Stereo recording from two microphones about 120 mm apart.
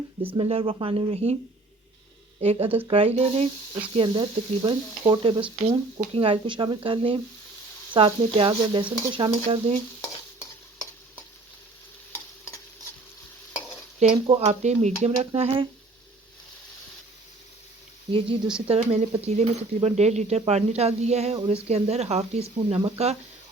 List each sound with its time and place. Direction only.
0.3 s speech: 50° right (ahead or behind)
2.4 s speech: 55° right (ahead or behind)
12.1 s stir: 25° left (ahead or behind)
14.0 s speech: 65° right (ahead or behind)
15.4 s speech: 55° right (ahead or behind)
18.1 s speech: 50° right (ahead or behind)
18.7 s speech: 60° right (ahead or behind)
21.4 s speech: 50° right (ahead or behind)